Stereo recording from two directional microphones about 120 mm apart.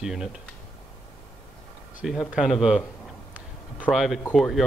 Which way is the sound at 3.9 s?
Centre (ahead or behind).